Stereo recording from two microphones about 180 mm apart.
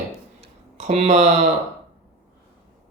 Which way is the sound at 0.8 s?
40° right (ahead or behind).